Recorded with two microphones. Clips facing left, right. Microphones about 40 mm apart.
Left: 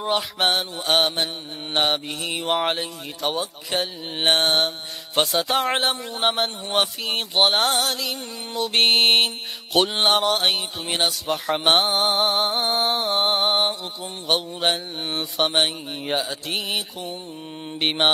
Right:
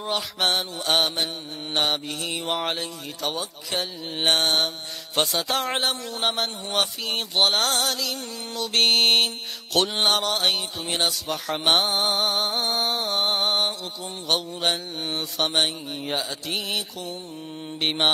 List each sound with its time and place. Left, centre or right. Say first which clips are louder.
0.0 s mantra: left 3 dB; centre